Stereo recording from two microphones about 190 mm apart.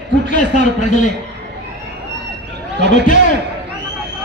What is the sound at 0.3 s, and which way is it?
Speech, 40° left (ahead or behind).